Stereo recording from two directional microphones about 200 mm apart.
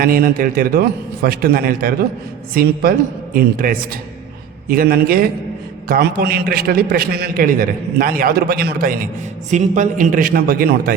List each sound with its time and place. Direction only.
0.0 s a man's voice: 45° right (ahead or behind)
9.5 s a man's voice: 35° right (ahead or behind)